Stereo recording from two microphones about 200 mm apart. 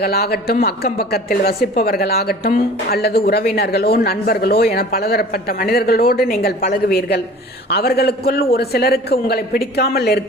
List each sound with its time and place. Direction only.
0.0 s speech: 50° left (ahead or behind)